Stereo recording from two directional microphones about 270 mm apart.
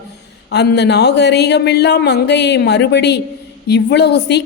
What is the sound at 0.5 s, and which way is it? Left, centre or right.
A woman's voice, left.